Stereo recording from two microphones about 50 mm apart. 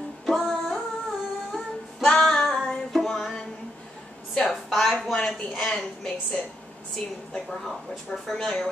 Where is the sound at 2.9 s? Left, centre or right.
Centre.